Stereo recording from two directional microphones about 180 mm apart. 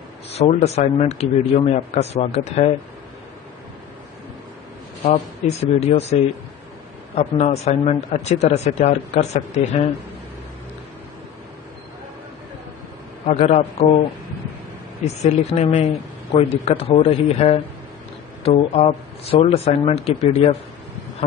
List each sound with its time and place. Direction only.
0.3 s speech: 35° left (ahead or behind)
5.1 s speech: 35° left (ahead or behind)
7.2 s speech: 35° left (ahead or behind)
13.3 s speech: 35° left (ahead or behind)
15.2 s speech: 35° left (ahead or behind)